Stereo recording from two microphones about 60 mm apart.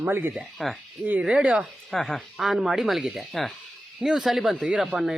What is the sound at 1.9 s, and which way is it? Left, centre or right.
Speech, centre.